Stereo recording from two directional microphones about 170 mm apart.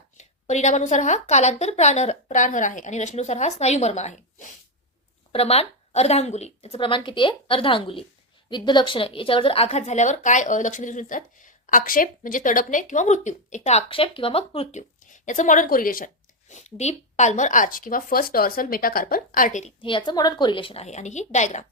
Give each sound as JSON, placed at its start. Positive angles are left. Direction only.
{"t": 0.2, "sound": "a woman's voice", "side_deg": 45}
{"t": 5.3, "sound": "a woman's voice", "side_deg": 35}
{"t": 19.8, "sound": "a woman's voice", "side_deg": 30}